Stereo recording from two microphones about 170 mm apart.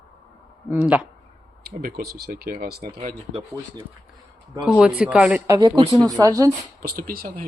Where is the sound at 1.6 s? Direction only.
60° right (ahead or behind).